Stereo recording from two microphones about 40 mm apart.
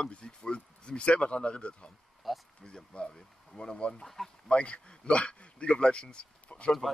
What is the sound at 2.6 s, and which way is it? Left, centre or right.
Speech, left.